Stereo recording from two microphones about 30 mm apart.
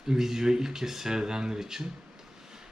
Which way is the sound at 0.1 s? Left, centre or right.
Centre.